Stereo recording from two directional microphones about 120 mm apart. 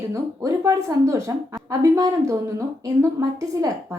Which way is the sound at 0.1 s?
25° right (ahead or behind).